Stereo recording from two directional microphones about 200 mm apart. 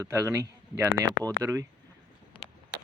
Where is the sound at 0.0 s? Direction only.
15° right (ahead or behind).